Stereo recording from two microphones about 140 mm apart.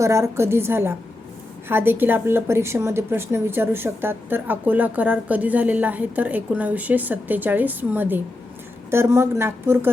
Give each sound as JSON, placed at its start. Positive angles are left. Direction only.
{"t": 0.0, "sound": "speech", "side_deg": -20}